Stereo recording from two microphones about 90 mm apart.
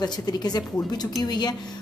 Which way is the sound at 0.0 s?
50° left (ahead or behind).